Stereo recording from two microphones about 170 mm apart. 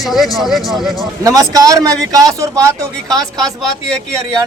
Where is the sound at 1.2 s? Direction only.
20° right (ahead or behind).